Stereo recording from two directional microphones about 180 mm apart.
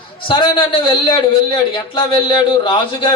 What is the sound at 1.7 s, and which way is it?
A man's voice, 30° left (ahead or behind).